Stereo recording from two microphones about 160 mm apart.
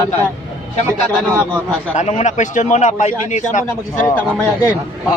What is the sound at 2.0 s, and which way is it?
A man's voice, 45° left (ahead or behind).